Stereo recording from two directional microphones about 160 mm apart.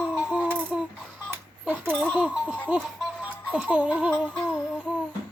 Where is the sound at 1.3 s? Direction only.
10° right (ahead or behind).